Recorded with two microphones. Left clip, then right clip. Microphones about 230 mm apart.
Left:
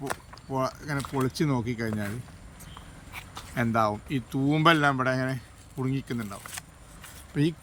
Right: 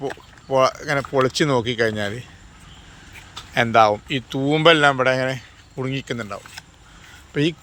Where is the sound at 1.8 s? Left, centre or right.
Centre.